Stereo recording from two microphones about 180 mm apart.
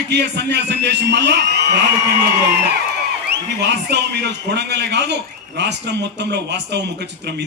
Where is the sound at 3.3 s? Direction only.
70° right (ahead or behind).